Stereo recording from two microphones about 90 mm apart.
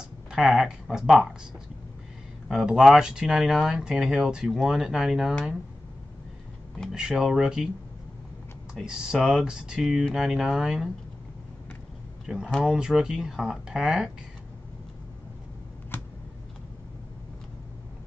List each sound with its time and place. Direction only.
0.3 s speech: 5° right (ahead or behind)
2.4 s speech: 5° right (ahead or behind)
6.9 s speech: 5° right (ahead or behind)
8.7 s speech: 5° right (ahead or behind)
12.6 s speech: 5° right (ahead or behind)
15.9 s a sound: 25° left (ahead or behind)